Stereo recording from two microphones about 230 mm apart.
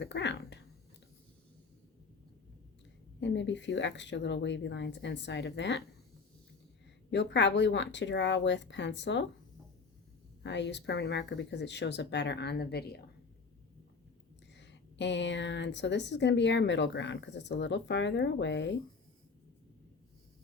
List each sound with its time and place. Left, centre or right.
0.0 s speech: left
3.2 s speech: left
7.1 s speech: left
10.4 s speech: left
14.5 s speech: left